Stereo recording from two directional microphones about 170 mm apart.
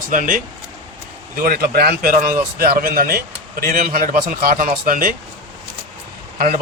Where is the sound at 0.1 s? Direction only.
50° right (ahead or behind).